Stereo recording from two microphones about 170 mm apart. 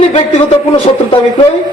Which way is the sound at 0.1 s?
40° left (ahead or behind).